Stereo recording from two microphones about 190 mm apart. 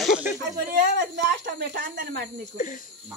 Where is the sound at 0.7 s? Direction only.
50° right (ahead or behind).